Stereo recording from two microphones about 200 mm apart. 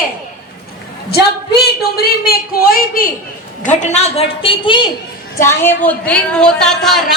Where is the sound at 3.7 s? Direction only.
35° left (ahead or behind).